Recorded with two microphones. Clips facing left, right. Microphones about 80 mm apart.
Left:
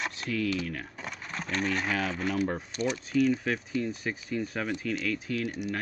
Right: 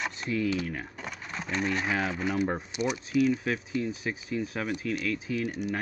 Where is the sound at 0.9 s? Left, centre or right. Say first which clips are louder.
Even; centre.